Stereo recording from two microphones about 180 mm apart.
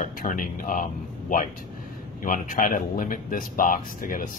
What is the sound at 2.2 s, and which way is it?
Speech, 50° left (ahead or behind).